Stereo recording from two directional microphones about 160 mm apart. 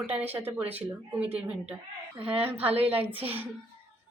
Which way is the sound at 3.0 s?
35° right (ahead or behind).